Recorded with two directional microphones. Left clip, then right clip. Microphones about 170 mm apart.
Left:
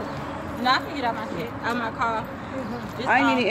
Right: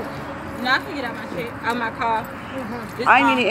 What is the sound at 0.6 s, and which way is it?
Speech, 20° left (ahead or behind).